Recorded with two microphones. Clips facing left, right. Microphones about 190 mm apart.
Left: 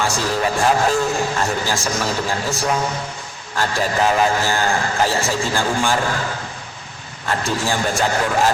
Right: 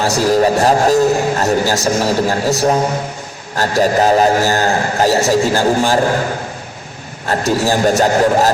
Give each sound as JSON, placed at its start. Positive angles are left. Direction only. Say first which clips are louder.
{"t": 0.0, "sound": "a man's voice", "louder": "right 8 dB", "side_deg": -40}
{"t": 7.3, "sound": "a man's voice", "louder": "right 6 dB", "side_deg": -40}